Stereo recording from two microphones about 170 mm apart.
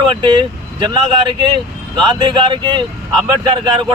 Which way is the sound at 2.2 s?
25° right (ahead or behind).